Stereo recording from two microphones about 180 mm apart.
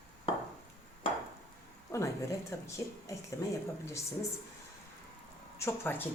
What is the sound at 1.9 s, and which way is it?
Speech, 15° left (ahead or behind).